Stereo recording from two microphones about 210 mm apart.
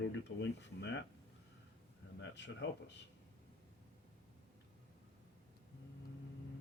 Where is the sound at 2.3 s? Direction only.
55° left (ahead or behind).